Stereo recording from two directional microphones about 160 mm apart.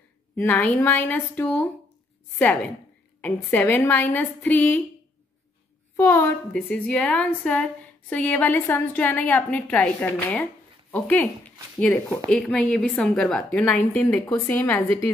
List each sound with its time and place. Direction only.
0.4 s a woman's voice: 10° left (ahead or behind)
5.9 s a woman's voice: 20° left (ahead or behind)
6.5 s a woman's voice: 5° left (ahead or behind)